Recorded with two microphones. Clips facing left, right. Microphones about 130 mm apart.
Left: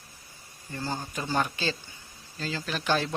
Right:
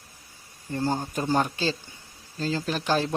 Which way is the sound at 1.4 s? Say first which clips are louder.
Right 4 dB; 30° right (ahead or behind).